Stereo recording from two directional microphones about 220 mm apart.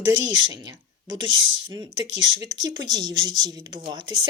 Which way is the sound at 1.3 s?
60° right (ahead or behind).